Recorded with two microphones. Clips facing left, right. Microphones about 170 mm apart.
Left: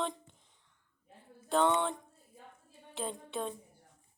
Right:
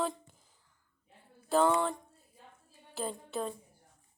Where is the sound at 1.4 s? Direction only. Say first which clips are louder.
Right 2 dB; 5° right (ahead or behind).